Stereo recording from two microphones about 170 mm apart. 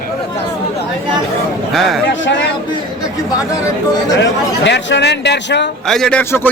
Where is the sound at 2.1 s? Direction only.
90° left.